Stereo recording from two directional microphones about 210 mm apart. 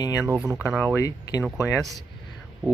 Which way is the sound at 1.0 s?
15° left (ahead or behind).